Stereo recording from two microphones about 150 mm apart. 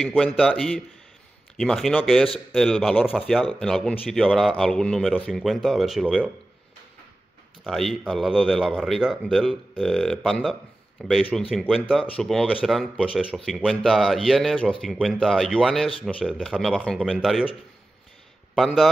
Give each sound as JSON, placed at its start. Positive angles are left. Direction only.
{"t": 0.0, "sound": "speech", "side_deg": 5}
{"t": 7.6, "sound": "speech", "side_deg": 0}
{"t": 18.5, "sound": "a man's voice", "side_deg": 0}